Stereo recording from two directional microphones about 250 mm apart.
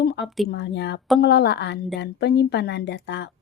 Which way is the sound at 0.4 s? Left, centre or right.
Left.